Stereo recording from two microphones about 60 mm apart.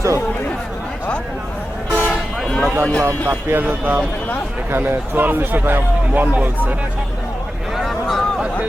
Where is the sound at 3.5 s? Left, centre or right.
Right.